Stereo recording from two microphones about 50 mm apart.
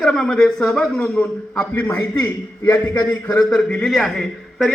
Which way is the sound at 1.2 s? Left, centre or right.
Left.